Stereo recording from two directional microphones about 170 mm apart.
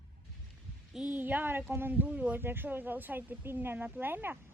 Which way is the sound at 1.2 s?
10° right (ahead or behind).